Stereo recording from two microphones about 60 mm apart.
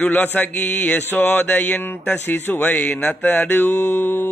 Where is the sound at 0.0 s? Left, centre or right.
Left.